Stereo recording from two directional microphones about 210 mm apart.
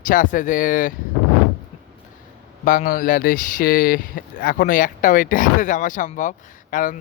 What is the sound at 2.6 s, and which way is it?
Speech, 40° left (ahead or behind).